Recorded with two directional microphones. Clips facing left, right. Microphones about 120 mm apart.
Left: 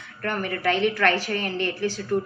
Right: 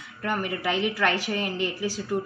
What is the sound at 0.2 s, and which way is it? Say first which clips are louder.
A woman's voice: left 2 dB; 10° right (ahead or behind).